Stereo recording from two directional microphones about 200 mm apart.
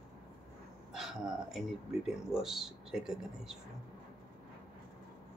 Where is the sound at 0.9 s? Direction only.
Centre (ahead or behind).